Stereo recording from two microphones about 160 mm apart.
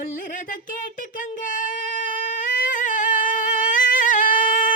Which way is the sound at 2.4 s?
55° left (ahead or behind).